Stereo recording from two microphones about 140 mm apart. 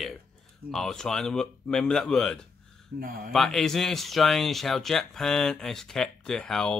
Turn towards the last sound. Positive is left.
turn(degrees=5)  # may be behind; listen again after turning